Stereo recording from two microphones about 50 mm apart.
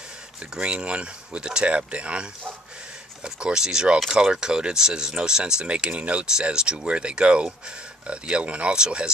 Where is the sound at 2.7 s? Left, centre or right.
Centre.